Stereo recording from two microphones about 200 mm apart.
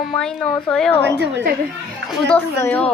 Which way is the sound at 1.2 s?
60° right (ahead or behind).